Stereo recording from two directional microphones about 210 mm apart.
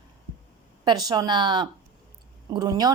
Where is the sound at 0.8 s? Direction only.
20° right (ahead or behind).